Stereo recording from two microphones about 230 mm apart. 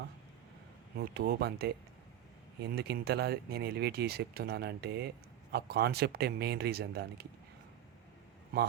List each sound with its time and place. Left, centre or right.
0.9 s speech: right